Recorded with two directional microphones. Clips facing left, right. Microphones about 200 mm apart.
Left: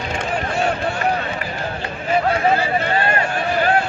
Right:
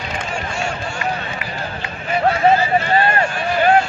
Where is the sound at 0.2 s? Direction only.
60° left (ahead or behind).